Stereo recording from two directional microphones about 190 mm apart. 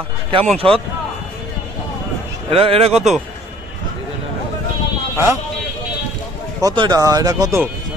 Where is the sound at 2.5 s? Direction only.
30° right (ahead or behind).